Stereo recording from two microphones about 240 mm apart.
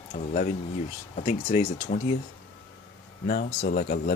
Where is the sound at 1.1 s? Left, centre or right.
Left.